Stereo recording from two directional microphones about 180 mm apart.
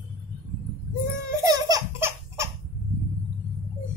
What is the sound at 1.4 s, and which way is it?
Baby laughter, 20° right (ahead or behind).